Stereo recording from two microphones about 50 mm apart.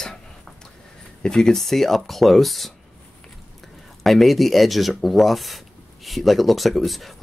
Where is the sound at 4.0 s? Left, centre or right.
Centre.